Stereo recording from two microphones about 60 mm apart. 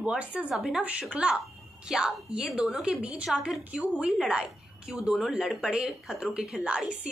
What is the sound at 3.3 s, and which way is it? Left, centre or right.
Speech, centre.